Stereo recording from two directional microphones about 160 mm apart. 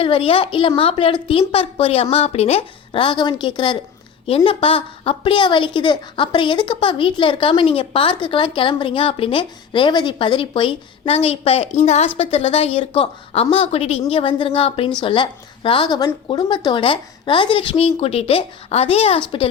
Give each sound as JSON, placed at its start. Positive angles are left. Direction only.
{"t": 0.0, "sound": "a woman's voice", "side_deg": 35}